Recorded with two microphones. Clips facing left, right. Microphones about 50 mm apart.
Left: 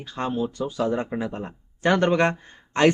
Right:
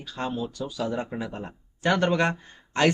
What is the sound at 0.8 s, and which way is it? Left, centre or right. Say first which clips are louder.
Speech: left 4 dB; left.